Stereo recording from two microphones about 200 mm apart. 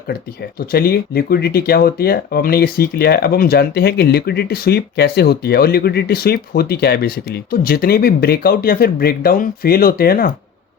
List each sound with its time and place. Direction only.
0.6 s speech: 50° left (ahead or behind)